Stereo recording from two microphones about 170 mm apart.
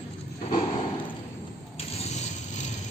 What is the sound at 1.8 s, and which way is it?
Vehicle, 40° left (ahead or behind).